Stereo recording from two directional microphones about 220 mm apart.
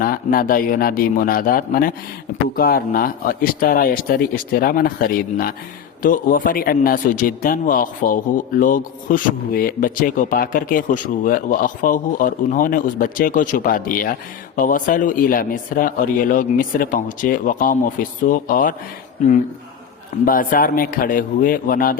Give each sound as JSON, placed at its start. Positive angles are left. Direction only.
{"t": 0.0, "sound": "speech", "side_deg": 40}
{"t": 20.2, "sound": "speech", "side_deg": 40}